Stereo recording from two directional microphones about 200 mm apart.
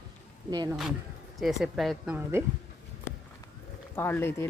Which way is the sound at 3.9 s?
10° left (ahead or behind).